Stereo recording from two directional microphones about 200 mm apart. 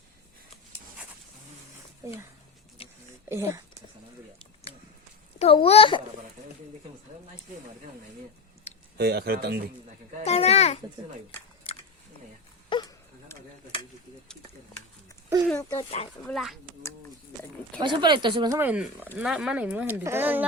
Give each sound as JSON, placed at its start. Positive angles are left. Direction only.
{"t": 3.2, "sound": "speech", "side_deg": -15}
{"t": 5.4, "sound": "a child's voice", "side_deg": 30}
{"t": 9.0, "sound": "speech", "side_deg": -55}
{"t": 10.2, "sound": "a child's voice", "side_deg": 30}
{"t": 11.7, "sound": "a sound", "side_deg": 30}
{"t": 15.4, "sound": "a sound", "side_deg": 10}
{"t": 15.8, "sound": "speech", "side_deg": 30}
{"t": 16.2, "sound": "speech", "side_deg": 0}
{"t": 17.7, "sound": "speech", "side_deg": -20}
{"t": 18.6, "sound": "speech", "side_deg": -5}